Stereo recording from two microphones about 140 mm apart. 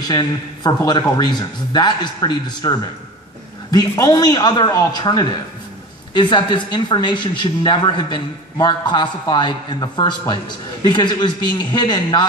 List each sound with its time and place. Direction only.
0.1 s a man's voice: 30° left (ahead or behind)